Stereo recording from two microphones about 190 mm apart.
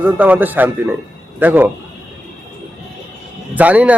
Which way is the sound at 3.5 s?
10° right (ahead or behind).